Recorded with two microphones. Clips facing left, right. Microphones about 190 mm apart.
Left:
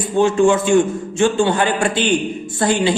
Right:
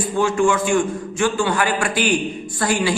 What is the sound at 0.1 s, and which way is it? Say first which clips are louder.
A man's voice: left 5 dB; 25° left (ahead or behind).